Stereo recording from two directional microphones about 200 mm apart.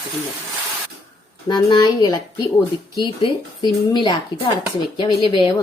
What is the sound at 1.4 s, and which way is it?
Speech, 20° left (ahead or behind).